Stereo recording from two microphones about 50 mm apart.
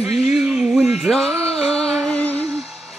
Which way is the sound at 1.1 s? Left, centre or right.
Centre.